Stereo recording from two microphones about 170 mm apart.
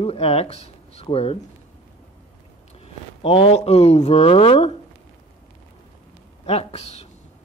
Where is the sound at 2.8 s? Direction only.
35° left (ahead or behind).